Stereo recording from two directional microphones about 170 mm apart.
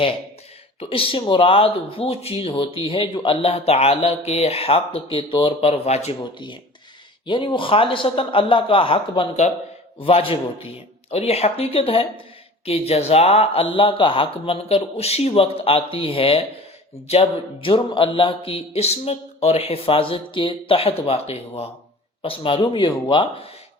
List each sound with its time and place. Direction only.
0.8 s a man's voice: 30° left (ahead or behind)